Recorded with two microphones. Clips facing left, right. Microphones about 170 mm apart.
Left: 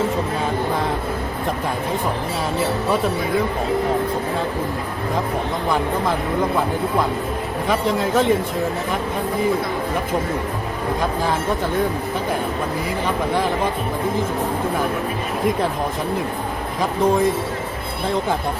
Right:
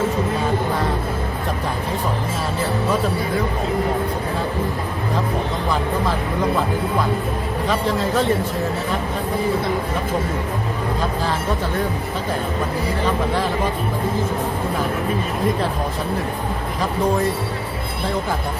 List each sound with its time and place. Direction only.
7.7 s a man's voice: 15° left (ahead or behind)